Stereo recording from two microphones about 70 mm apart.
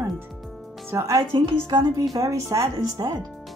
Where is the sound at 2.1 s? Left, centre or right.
Right.